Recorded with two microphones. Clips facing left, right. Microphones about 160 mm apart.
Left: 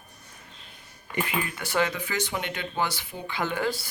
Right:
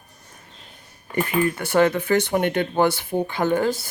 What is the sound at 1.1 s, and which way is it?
Speech, 50° right (ahead or behind).